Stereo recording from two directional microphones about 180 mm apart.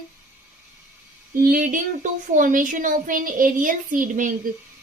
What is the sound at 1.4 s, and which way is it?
Female singing, 50° right (ahead or behind).